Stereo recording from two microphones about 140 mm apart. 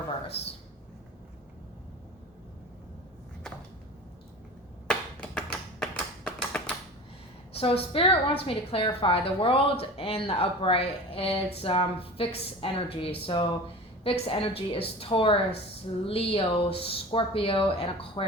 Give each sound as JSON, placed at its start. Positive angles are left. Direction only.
{"t": 4.9, "sound": "computer keyboard", "side_deg": 10}
{"t": 7.5, "sound": "a woman's voice", "side_deg": 45}